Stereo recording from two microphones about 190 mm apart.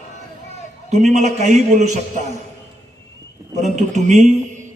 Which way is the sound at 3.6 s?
40° right (ahead or behind).